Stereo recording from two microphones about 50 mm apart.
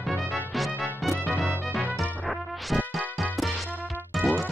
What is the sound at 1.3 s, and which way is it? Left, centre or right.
Music, right.